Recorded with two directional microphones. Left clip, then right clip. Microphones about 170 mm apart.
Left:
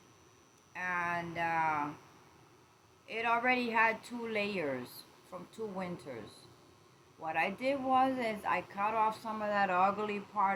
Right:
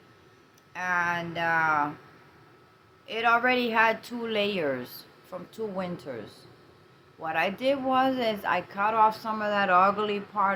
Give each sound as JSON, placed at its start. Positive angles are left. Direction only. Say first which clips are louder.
{"t": 0.7, "sound": "speech", "louder": "right 8 dB", "side_deg": -25}
{"t": 3.1, "sound": "speech", "louder": "right 8 dB", "side_deg": -25}
{"t": 7.3, "sound": "speech", "louder": "right 7 dB", "side_deg": -30}